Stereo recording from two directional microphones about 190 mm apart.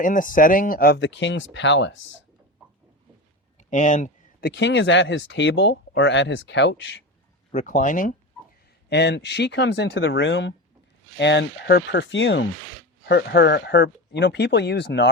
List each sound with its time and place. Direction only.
0.0 s speech: 45° left (ahead or behind)
0.9 s speech: 70° left (ahead or behind)
3.6 s speech: 40° left (ahead or behind); by 7.0 s 70° left (ahead or behind)
7.5 s speech: 45° left (ahead or behind)
8.9 s speech: 65° left (ahead or behind)